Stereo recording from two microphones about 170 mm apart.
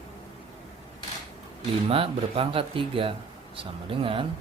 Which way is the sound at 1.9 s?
35° right (ahead or behind).